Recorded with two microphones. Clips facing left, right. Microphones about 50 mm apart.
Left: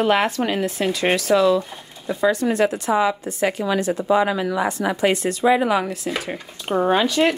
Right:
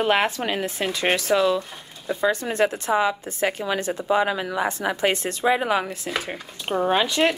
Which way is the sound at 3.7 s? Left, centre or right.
Right.